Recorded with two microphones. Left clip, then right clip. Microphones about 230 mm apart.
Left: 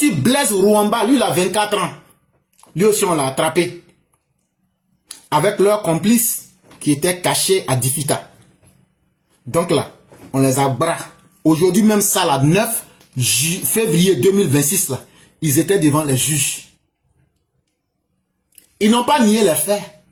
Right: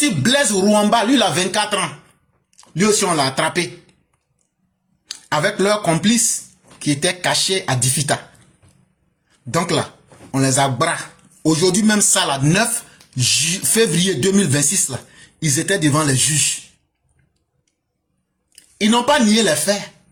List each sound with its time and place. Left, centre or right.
0.0 s speech: right
5.0 s speech: right
9.5 s speech: right
18.5 s speech: right